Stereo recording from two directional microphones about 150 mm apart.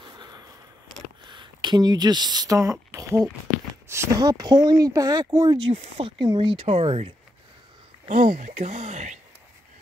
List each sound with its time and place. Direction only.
0.0 s a sound: 30° right (ahead or behind)
1.2 s speech: 30° right (ahead or behind)
5.7 s speech: 40° right (ahead or behind)
8.1 s speech: 55° right (ahead or behind)